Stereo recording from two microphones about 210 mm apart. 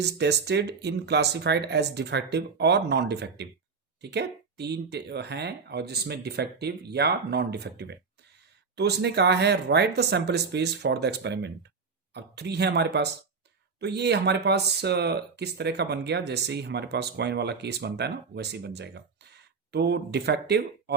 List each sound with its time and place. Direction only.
0.0 s speech: 55° right (ahead or behind)